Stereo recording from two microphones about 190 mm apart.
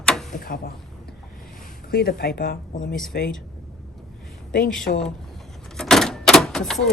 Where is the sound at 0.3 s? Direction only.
50° left (ahead or behind).